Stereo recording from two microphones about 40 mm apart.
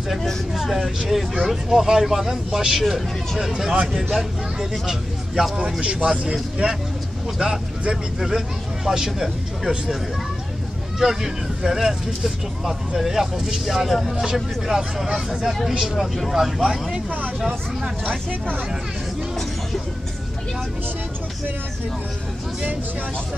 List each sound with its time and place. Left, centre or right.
0.1 s speech: centre
11.0 s speech: centre
13.8 s speech: centre